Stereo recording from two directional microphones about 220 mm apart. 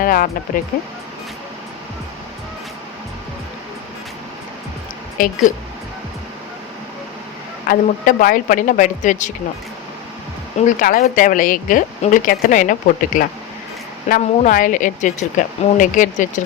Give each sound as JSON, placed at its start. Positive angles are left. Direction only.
{"t": 0.0, "sound": "speech", "side_deg": 40}
{"t": 5.1, "sound": "speech", "side_deg": 40}
{"t": 7.7, "sound": "speech", "side_deg": 40}
{"t": 10.7, "sound": "speech", "side_deg": 35}